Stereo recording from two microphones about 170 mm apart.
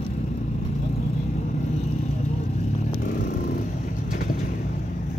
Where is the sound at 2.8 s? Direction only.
55° left (ahead or behind).